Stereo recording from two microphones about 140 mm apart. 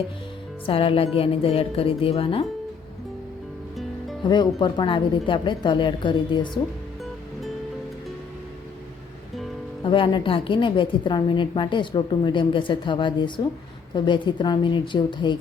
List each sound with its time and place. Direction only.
0.6 s a woman's voice: 40° left (ahead or behind)
4.2 s a woman's voice: 35° left (ahead or behind)
9.8 s a woman's voice: 35° left (ahead or behind)